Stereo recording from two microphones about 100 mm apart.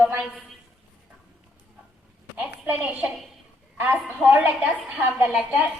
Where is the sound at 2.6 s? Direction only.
15° right (ahead or behind).